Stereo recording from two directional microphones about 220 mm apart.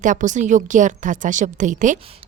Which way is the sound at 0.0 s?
35° right (ahead or behind).